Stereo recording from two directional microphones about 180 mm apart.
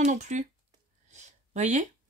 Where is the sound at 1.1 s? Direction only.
40° right (ahead or behind).